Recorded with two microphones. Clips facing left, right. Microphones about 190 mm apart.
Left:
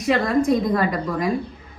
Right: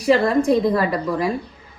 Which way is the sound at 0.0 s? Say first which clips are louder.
Right 3 dB; 30° right (ahead or behind).